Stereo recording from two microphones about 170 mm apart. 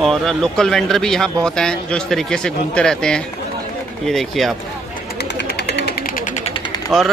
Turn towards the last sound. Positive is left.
turn(degrees=30)  # may be behind; listen again after turning